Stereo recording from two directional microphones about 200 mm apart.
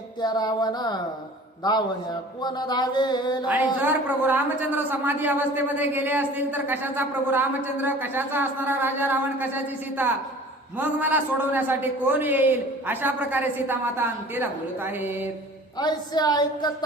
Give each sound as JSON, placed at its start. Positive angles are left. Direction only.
{"t": 0.2, "sound": "mantra", "side_deg": 20}
{"t": 3.4, "sound": "a woman's voice", "side_deg": -10}
{"t": 15.8, "sound": "mantra", "side_deg": 20}